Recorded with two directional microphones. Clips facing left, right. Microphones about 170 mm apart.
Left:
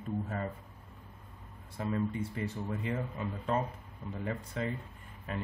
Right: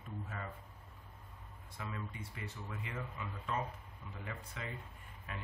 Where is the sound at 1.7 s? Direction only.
40° left (ahead or behind).